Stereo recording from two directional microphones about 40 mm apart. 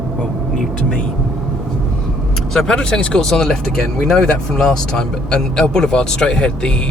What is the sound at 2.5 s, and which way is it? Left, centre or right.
Speech, centre.